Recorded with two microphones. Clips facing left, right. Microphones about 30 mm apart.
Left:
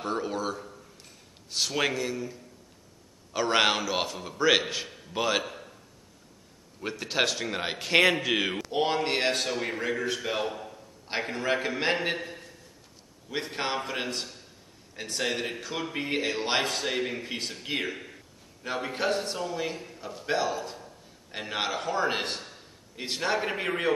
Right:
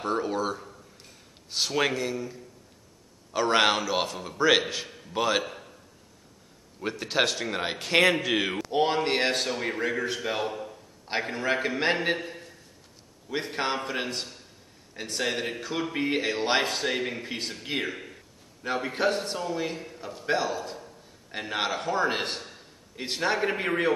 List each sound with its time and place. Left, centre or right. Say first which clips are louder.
0.0 s speech: right 3 dB; centre
3.3 s speech: right 2 dB; centre
6.8 s a man's voice: right 2 dB; centre